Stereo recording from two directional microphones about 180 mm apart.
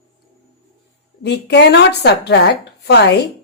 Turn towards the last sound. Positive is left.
turn(degrees=70)  # may be behind; listen again after turning